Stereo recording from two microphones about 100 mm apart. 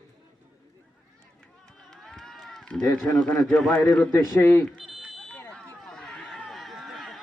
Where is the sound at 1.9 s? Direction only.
5° left (ahead or behind).